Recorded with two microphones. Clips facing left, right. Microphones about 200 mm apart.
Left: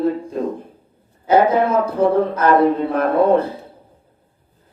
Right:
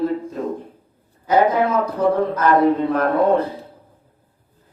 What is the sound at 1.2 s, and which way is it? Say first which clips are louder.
Speech: left 2 dB; 30° left (ahead or behind).